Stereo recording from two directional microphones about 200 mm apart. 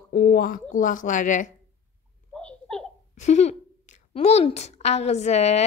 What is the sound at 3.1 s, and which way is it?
A woman's voice, 35° left (ahead or behind).